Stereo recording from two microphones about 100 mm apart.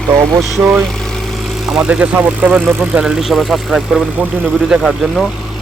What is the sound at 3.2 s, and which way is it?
Speech, centre (ahead or behind).